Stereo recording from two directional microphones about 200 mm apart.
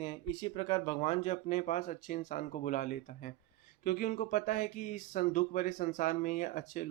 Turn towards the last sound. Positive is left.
turn(degrees=40)  # may be behind; listen again after turning